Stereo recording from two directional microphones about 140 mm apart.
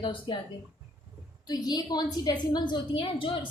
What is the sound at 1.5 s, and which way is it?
A woman's voice, 30° left (ahead or behind).